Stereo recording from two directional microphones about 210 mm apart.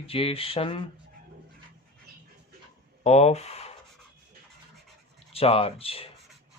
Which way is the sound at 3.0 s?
30° left (ahead or behind).